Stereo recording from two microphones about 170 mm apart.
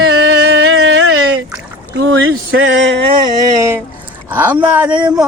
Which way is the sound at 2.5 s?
90° right.